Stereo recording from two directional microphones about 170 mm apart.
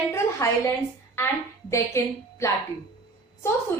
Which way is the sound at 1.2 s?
15° left (ahead or behind).